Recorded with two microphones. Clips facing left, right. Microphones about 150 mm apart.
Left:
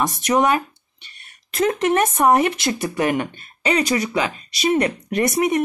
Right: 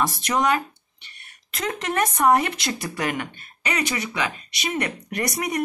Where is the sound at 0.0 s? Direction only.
20° left (ahead or behind).